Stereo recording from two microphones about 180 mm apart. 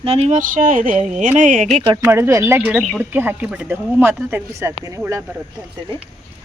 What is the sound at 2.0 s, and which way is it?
Speech, 15° right (ahead or behind).